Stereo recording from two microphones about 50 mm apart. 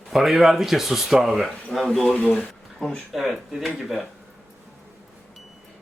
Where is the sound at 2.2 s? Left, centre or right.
Left.